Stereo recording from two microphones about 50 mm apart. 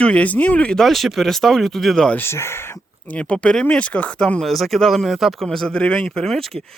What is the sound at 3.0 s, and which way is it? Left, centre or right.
Speech, left.